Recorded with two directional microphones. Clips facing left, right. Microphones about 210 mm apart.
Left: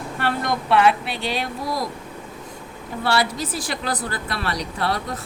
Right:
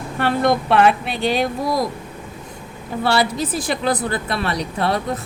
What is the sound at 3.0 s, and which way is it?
Speech, 25° right (ahead or behind).